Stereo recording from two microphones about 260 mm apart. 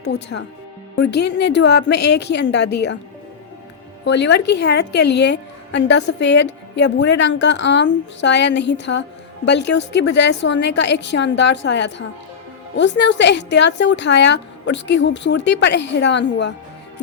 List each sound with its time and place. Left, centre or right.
0.0 s a woman's voice: left
4.0 s a woman's voice: left